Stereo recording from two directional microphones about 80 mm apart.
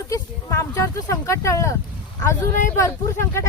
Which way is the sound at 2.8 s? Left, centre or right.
Left.